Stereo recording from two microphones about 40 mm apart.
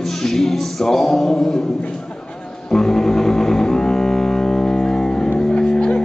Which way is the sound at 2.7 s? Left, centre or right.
Centre.